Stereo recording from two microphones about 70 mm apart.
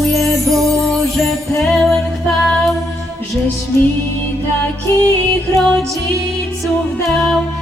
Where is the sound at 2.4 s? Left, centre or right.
Centre.